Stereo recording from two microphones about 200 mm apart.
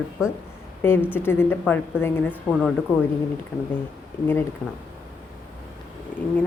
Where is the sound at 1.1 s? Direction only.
10° left (ahead or behind).